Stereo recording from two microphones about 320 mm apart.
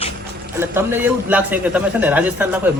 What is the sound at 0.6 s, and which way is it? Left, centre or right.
A man's voice, centre.